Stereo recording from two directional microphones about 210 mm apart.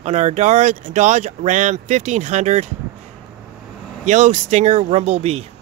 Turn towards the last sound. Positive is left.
turn(degrees=-30)  # may be behind; listen again after turning